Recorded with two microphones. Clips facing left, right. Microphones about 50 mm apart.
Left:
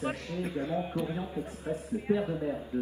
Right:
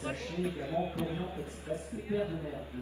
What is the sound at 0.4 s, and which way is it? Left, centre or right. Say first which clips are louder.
A man's voice: even; left.